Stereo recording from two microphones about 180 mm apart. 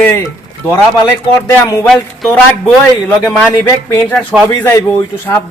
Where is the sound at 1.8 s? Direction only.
Centre (ahead or behind).